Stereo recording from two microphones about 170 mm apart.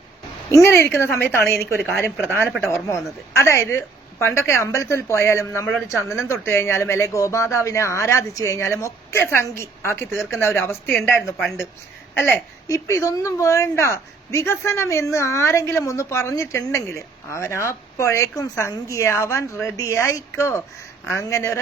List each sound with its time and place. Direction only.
0.5 s a woman's voice: 15° left (ahead or behind)
11.3 s speech: 5° right (ahead or behind)
12.1 s a woman's voice: 15° left (ahead or behind)